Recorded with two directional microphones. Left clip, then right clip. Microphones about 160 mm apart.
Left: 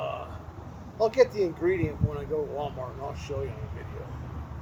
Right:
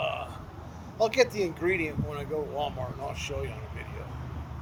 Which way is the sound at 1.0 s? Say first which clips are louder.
Left 2 dB; 25° right (ahead or behind).